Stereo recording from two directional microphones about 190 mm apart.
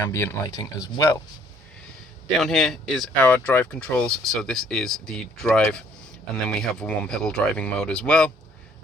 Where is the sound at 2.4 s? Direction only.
Centre (ahead or behind).